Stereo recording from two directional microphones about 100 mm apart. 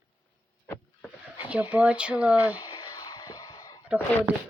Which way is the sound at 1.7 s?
15° right (ahead or behind).